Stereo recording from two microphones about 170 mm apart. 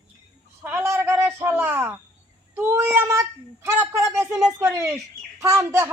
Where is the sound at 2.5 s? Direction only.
15° right (ahead or behind).